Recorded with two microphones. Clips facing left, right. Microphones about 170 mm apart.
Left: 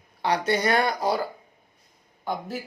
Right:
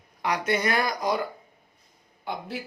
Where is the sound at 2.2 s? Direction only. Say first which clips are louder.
Left 3 dB; 45° left (ahead or behind).